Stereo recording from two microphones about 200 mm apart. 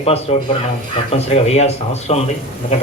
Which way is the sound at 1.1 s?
30° left (ahead or behind).